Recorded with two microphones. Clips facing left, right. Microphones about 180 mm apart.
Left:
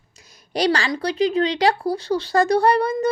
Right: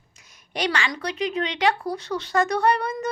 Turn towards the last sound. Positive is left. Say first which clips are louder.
# left 5 dB
turn(degrees=30)  # may be behind; listen again after turning